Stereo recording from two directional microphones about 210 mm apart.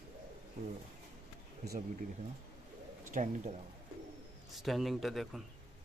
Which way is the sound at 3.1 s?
35° right (ahead or behind).